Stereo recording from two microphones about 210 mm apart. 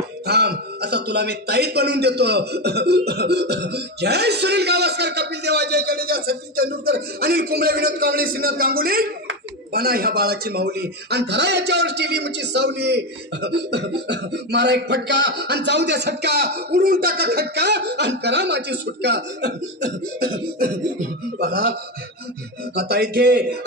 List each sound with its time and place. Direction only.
0.3 s speech: 50° right (ahead or behind)
22.8 s speech: 50° right (ahead or behind)